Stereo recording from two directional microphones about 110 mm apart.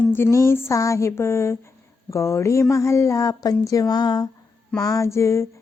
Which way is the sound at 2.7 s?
25° left (ahead or behind).